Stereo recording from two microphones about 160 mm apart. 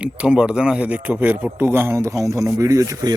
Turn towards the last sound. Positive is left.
turn(degrees=-20)  # may be behind; listen again after turning